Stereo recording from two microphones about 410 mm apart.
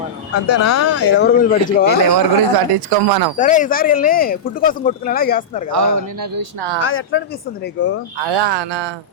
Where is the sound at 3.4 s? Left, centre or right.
Centre.